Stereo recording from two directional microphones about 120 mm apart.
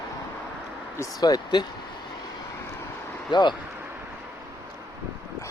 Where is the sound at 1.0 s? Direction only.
30° left (ahead or behind).